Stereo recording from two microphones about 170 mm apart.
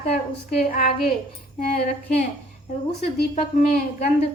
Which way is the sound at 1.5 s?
40° left (ahead or behind).